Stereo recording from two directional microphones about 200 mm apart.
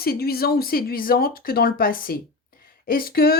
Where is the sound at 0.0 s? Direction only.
50° left (ahead or behind).